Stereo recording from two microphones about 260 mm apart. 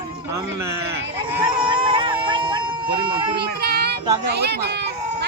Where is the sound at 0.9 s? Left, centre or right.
Centre.